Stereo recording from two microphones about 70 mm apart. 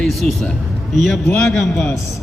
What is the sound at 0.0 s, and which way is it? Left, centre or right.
A man's voice, centre.